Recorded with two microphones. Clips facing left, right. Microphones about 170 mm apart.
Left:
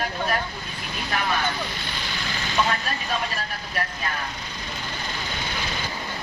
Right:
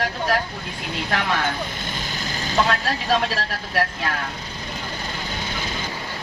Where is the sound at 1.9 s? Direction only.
45° right (ahead or behind).